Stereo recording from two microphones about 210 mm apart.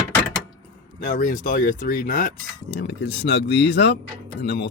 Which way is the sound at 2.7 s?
55° left (ahead or behind).